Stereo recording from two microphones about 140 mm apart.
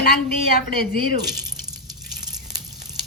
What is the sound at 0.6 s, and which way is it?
Speech, 90° left.